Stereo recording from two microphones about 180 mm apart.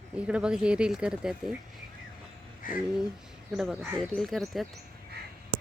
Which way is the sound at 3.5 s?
5° right (ahead or behind).